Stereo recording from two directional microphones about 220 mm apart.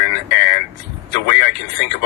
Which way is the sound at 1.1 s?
50° left (ahead or behind).